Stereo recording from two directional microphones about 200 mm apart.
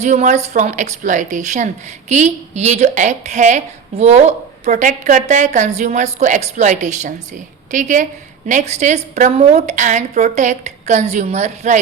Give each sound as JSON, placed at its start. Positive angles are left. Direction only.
{"t": 0.0, "sound": "a woman's voice", "side_deg": -35}